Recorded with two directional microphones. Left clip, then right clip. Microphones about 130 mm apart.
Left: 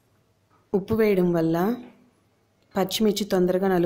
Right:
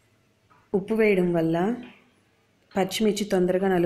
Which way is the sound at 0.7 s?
15° left (ahead or behind).